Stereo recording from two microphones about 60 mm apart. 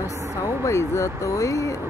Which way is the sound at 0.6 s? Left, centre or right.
Left.